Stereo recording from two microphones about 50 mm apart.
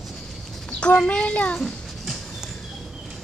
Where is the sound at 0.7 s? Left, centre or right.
Left.